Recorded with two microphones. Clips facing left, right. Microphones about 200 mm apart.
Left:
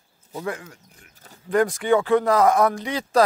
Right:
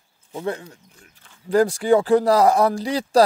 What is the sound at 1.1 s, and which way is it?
Mechanisms, 40° left (ahead or behind).